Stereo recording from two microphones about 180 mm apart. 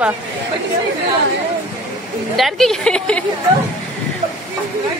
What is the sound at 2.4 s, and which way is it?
Speech, centre (ahead or behind).